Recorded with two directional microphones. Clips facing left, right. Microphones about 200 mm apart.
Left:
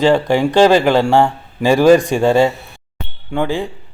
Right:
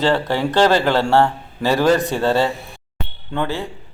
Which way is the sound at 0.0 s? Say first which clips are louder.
Left 5 dB; 15° left (ahead or behind).